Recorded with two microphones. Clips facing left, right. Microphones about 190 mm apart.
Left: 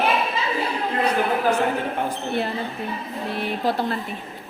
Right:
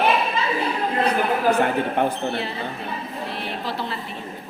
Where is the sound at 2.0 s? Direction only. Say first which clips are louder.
Right 5 dB; 60° right (ahead or behind).